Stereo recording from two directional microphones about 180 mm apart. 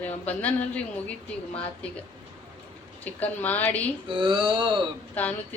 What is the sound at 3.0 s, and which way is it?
Speech, 10° left (ahead or behind).